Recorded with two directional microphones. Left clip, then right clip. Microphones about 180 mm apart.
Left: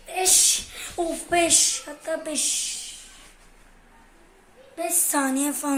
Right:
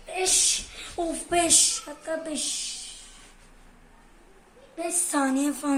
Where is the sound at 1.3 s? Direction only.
35° right (ahead or behind); by 2.5 s 15° right (ahead or behind).